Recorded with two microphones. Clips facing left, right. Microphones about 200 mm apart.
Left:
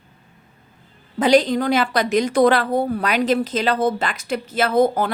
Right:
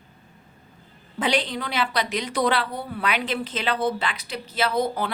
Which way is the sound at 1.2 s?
40° left (ahead or behind).